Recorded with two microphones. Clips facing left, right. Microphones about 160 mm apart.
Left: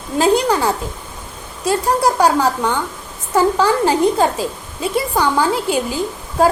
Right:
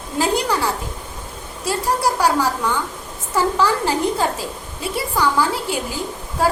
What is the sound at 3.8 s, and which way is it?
A woman's voice, 20° left (ahead or behind).